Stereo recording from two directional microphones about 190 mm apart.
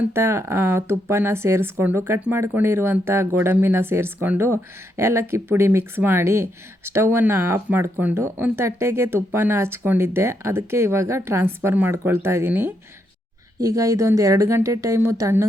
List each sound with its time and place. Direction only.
0.0 s speech: 15° right (ahead or behind)